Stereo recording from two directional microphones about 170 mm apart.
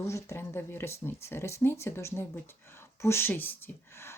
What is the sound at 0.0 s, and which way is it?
Speech, 15° left (ahead or behind).